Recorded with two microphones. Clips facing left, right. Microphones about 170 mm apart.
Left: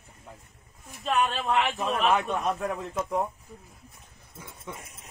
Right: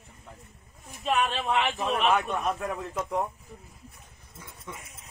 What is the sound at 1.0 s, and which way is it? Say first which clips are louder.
A man's voice: even; centre (ahead or behind).